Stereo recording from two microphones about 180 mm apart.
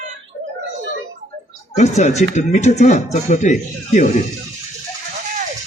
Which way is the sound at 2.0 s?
40° left (ahead or behind).